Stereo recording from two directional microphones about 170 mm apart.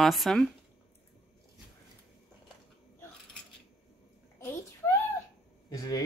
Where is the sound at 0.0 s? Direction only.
Centre (ahead or behind).